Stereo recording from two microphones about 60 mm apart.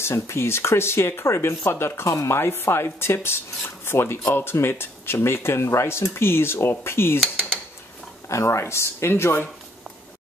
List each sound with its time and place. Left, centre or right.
0.0 s speech: left
8.3 s speech: left